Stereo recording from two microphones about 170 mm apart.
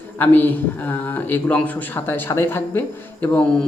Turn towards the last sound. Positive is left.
turn(degrees=5)  # may be behind; listen again after turning